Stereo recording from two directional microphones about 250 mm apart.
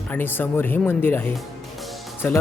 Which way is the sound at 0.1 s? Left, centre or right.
Centre.